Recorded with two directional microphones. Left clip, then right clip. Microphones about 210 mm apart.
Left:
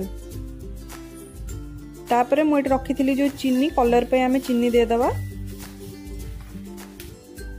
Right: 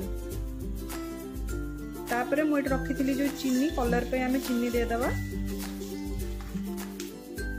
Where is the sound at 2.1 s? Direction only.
35° left (ahead or behind).